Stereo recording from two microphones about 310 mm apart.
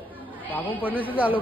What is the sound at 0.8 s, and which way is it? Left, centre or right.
Speech, centre.